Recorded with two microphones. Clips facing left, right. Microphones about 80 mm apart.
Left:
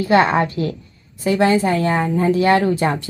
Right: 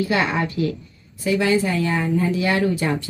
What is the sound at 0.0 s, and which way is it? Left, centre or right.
Speech, left.